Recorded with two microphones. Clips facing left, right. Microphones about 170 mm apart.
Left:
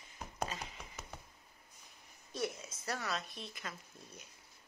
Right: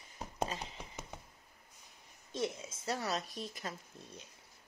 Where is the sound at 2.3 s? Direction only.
25° right (ahead or behind).